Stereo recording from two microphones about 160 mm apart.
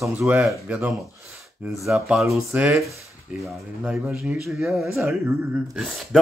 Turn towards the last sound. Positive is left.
turn(degrees=0)  # may be behind; listen again after turning